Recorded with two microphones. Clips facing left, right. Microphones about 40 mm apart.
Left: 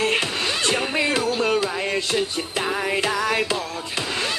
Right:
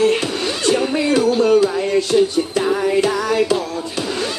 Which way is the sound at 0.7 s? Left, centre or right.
Left.